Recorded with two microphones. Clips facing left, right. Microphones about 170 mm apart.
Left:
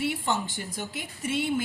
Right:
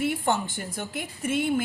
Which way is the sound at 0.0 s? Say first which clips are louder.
Right 3 dB; 50° right (ahead or behind).